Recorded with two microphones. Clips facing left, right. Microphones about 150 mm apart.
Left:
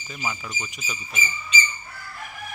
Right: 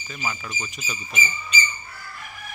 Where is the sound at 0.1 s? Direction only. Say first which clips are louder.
Even; 15° left (ahead or behind).